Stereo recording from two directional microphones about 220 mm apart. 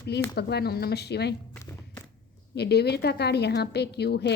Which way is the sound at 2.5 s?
50° left (ahead or behind).